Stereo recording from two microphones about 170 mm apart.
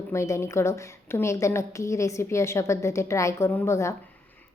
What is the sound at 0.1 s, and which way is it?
A woman's voice, 15° left (ahead or behind).